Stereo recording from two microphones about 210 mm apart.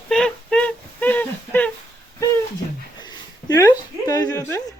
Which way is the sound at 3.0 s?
20° left (ahead or behind).